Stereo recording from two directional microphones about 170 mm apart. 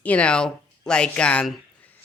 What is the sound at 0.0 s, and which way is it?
Speech, 10° left (ahead or behind).